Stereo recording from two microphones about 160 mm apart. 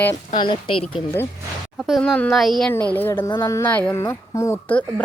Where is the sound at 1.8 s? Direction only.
Centre (ahead or behind).